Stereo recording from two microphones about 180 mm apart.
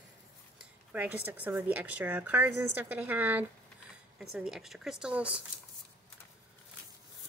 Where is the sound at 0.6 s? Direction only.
10° right (ahead or behind).